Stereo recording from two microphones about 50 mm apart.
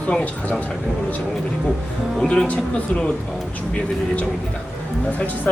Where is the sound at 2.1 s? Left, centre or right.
Centre.